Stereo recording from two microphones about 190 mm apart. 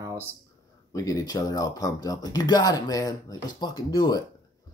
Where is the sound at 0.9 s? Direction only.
15° left (ahead or behind).